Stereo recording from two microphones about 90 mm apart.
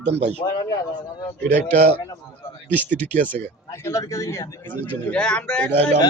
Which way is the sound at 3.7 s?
30° left (ahead or behind).